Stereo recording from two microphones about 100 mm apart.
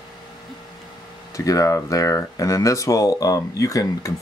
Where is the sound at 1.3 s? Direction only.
35° left (ahead or behind).